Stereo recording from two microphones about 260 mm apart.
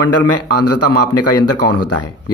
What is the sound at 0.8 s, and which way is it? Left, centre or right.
Speech, left.